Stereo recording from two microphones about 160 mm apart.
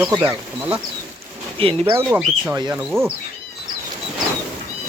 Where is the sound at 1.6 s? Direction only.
35° right (ahead or behind).